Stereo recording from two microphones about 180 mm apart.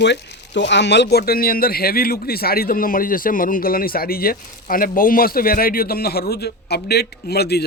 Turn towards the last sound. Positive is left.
turn(degrees=65)  # may be behind; listen again after turning